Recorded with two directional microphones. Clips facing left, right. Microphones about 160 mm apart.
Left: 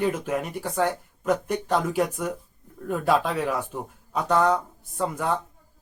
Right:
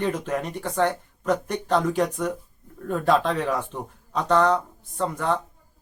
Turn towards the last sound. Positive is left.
turn(degrees=10)  # may be behind; listen again after turning